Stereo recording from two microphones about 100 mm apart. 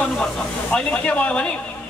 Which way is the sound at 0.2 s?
10° left (ahead or behind).